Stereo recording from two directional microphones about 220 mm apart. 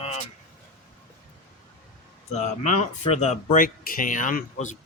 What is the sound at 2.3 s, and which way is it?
Speech, 35° left (ahead or behind).